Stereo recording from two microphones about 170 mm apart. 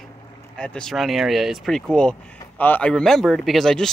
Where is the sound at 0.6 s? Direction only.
5° left (ahead or behind).